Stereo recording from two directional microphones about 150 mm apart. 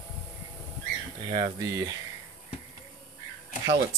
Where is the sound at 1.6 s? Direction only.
25° right (ahead or behind).